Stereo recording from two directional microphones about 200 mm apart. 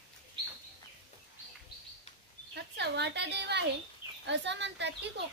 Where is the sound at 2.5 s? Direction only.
55° right (ahead or behind).